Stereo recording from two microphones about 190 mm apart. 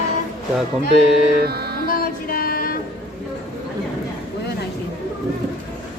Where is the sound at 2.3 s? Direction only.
50° left (ahead or behind).